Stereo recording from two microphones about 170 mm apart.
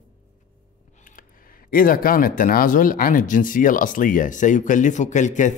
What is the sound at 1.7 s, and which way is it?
Speech, 55° left (ahead or behind).